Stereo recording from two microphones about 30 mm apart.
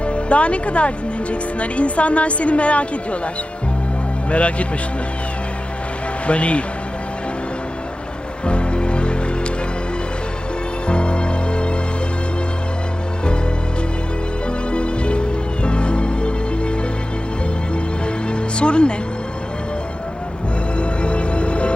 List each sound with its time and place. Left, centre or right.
0.0 s speech: left
4.3 s speech: left
6.2 s speech: left
8.4 s music: left
10.8 s music: left
14.7 s music: left
18.3 s music: left
20.7 s music: left